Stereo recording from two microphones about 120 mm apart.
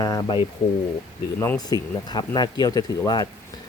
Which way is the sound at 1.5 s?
35° left (ahead or behind).